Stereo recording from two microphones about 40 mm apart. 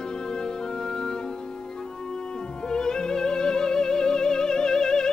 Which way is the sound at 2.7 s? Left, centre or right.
Centre.